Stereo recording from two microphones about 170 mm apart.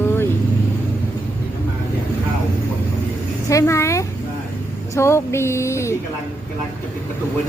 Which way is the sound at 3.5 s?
15° left (ahead or behind).